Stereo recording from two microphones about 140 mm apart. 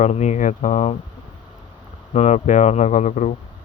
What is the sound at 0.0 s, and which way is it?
Speech, 55° left (ahead or behind).